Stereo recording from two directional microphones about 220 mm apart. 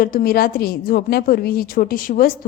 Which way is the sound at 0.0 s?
40° left (ahead or behind).